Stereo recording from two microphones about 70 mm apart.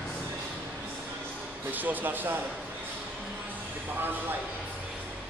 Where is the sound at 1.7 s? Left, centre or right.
Right.